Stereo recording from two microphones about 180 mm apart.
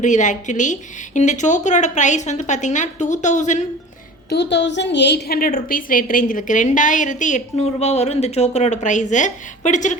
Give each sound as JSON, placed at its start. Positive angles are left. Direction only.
{"t": 0.0, "sound": "a woman's voice", "side_deg": 45}
{"t": 4.3, "sound": "a woman's voice", "side_deg": 70}